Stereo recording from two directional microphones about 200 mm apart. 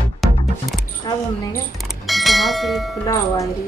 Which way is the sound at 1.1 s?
20° left (ahead or behind).